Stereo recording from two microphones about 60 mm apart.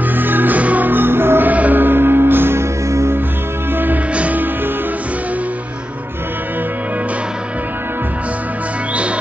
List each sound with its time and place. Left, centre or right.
0.1 s music: right
1.5 s music: right
2.9 s music: right
3.7 s music: right